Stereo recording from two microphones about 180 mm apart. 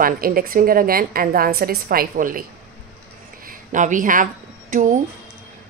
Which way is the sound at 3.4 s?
45° right (ahead or behind).